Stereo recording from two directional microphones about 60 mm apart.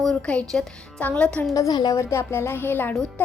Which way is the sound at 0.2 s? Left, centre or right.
Centre.